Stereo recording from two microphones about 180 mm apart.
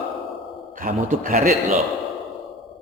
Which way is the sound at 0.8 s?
45° right (ahead or behind).